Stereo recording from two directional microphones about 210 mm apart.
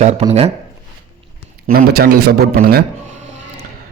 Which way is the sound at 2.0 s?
50° right (ahead or behind).